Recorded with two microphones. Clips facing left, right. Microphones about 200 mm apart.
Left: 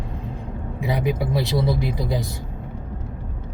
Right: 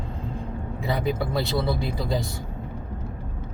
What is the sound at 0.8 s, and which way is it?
Speech, 15° left (ahead or behind).